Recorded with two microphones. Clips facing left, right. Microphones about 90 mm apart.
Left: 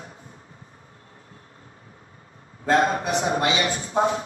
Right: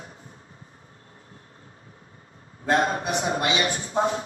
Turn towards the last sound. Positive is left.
turn(degrees=35)  # may be behind; listen again after turning